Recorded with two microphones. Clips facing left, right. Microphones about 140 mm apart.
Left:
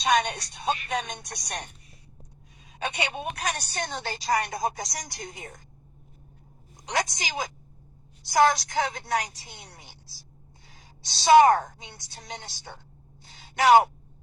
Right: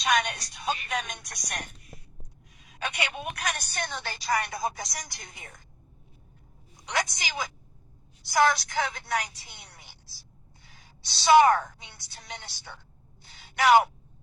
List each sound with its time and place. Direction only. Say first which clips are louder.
0.0 s a woman's voice: left 3 dB; 30° left (ahead or behind)
6.8 s a woman's voice: left 2 dB; 40° left (ahead or behind)
13.2 s a sound: left 2 dB; 40° left (ahead or behind)